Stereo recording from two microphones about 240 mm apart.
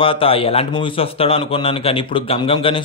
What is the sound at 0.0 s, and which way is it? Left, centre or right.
A man's voice, left.